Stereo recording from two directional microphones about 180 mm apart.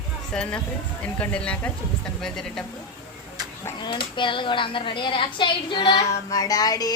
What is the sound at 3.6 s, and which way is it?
Speech, 25° left (ahead or behind).